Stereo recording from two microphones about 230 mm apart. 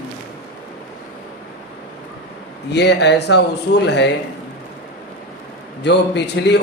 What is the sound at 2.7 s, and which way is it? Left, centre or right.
A man's voice, left.